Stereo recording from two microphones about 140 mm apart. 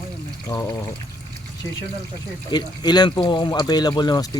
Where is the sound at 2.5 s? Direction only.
30° left (ahead or behind).